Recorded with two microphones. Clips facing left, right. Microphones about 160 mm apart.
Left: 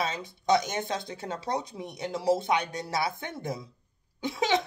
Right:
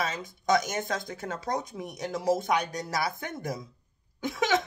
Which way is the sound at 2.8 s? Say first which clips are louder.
Even; 25° left (ahead or behind).